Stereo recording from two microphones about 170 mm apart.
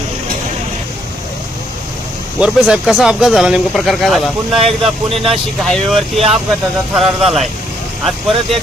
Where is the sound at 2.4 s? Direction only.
5° right (ahead or behind).